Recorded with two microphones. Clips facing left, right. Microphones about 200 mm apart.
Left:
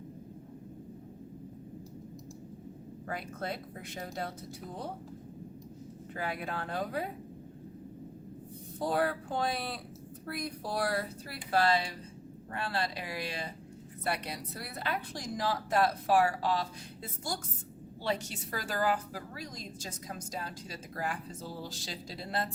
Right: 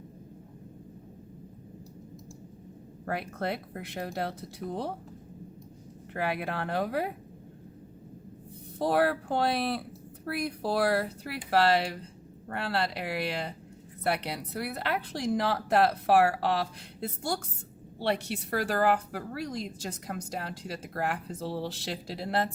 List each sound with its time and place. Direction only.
3.1 s speech: 65° right (ahead or behind)
6.1 s speech: 65° right (ahead or behind)
8.8 s a woman's voice: 70° right (ahead or behind)